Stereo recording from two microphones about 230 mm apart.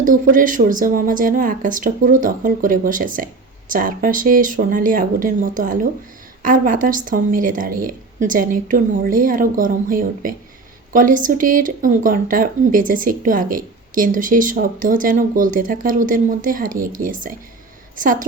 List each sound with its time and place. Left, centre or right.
0.0 s a woman's voice: right